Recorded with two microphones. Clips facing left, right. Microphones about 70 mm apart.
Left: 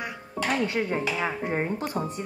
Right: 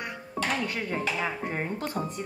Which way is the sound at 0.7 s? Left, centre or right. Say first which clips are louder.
Left 3 dB; centre.